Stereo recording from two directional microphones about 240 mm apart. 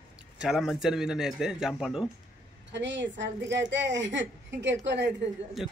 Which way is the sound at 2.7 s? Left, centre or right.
Right.